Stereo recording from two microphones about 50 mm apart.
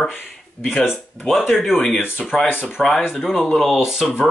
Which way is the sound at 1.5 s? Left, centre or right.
Centre.